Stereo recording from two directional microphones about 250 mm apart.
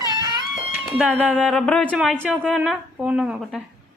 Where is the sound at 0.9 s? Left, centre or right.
Centre.